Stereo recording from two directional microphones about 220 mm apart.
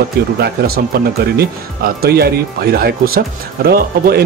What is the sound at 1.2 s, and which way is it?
Speech, 45° right (ahead or behind).